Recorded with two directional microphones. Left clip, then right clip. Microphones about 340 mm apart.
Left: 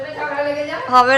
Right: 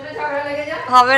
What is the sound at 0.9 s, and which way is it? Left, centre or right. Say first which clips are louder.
Speech: right 1 dB; centre.